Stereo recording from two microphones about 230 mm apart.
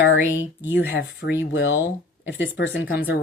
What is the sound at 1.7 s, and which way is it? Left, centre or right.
Speech, centre.